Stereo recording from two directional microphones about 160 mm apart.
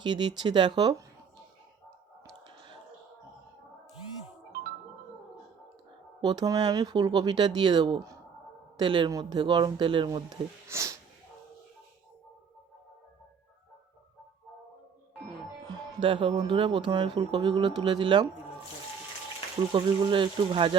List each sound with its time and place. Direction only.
0.0 s speech: 25° right (ahead or behind)
6.2 s speech: 25° right (ahead or behind)
15.7 s speech: 30° right (ahead or behind)
19.7 s speech: 30° right (ahead or behind)